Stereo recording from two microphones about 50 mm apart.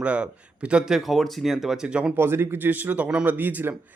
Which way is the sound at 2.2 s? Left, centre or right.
Right.